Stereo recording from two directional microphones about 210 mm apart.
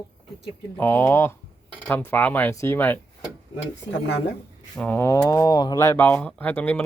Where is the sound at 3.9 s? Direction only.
55° left (ahead or behind).